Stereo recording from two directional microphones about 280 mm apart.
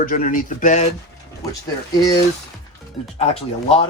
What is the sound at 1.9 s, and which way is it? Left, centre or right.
Speech, centre.